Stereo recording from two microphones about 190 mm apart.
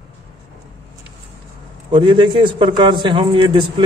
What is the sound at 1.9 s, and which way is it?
Speech, 25° right (ahead or behind).